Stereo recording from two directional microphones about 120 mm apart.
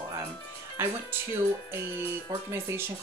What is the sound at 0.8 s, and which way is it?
Speech, 20° right (ahead or behind).